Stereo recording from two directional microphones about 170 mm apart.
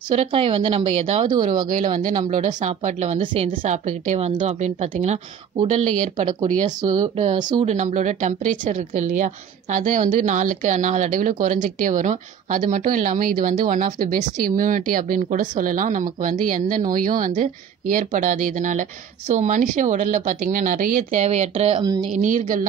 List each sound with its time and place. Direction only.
0.1 s a woman's voice: 35° right (ahead or behind)
3.2 s a woman's voice: 30° right (ahead or behind)
3.6 s a woman's voice: 45° right (ahead or behind)
6.8 s a woman's voice: 25° right (ahead or behind)
7.6 s a woman's voice: 45° right (ahead or behind)